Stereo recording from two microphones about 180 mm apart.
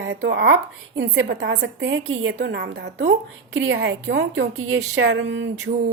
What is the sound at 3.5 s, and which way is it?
A woman's voice, 90° right.